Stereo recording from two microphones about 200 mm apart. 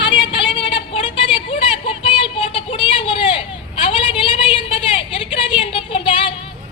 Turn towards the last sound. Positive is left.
turn(degrees=25)  # may be behind; listen again after turning